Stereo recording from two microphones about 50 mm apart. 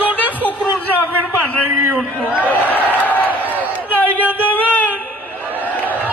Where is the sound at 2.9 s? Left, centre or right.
Left.